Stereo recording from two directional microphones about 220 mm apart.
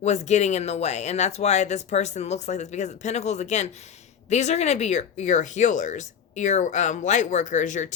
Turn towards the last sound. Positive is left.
turn(degrees=35)  # may be behind; listen again after turning